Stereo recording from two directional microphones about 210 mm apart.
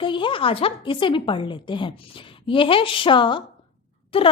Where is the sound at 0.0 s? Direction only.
25° left (ahead or behind).